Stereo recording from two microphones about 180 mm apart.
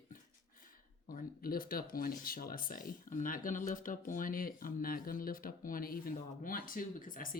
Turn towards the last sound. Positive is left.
turn(degrees=50)  # may be behind; listen again after turning